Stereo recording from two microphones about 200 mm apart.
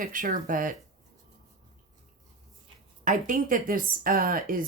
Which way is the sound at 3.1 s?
40° right (ahead or behind).